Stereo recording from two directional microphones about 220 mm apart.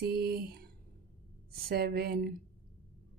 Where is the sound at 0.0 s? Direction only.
45° right (ahead or behind).